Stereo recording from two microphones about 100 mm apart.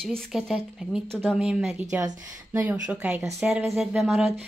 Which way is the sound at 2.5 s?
25° right (ahead or behind).